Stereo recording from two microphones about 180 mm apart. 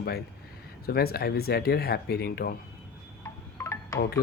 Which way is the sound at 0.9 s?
60° left (ahead or behind).